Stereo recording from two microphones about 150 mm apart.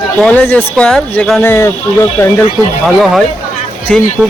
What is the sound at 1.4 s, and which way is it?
Speech, 20° left (ahead or behind).